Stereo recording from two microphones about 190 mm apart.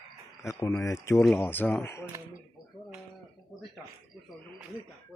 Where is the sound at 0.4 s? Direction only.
15° left (ahead or behind).